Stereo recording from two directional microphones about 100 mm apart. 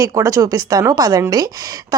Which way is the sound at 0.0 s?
35° right (ahead or behind).